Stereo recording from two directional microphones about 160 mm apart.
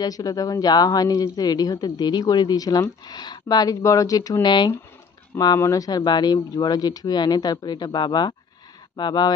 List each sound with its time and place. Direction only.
0.0 s speech: 25° left (ahead or behind)